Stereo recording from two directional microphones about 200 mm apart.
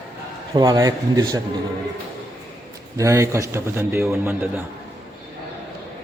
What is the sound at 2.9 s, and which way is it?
A man's voice, 15° right (ahead or behind).